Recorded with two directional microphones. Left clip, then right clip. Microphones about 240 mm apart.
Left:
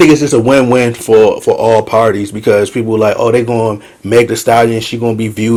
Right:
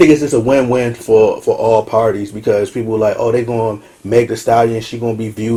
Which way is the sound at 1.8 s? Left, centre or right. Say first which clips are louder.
Left 4 dB; left.